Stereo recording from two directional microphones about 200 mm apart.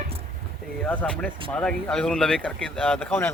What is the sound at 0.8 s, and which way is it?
Speech, 5° left (ahead or behind).